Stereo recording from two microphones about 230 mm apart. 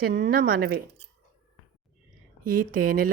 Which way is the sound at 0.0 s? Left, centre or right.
Right.